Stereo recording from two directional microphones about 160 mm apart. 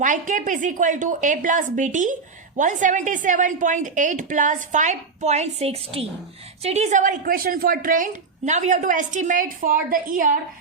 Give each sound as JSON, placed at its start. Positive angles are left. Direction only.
{"t": 0.0, "sound": "a woman's voice", "side_deg": -55}